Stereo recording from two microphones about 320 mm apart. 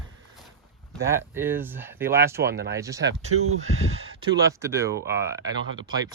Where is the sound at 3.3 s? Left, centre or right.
Right.